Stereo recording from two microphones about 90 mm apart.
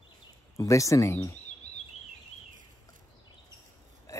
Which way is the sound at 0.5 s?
35° left (ahead or behind).